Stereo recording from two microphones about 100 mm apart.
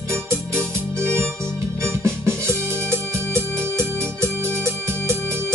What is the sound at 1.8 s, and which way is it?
Organ, 25° right (ahead or behind).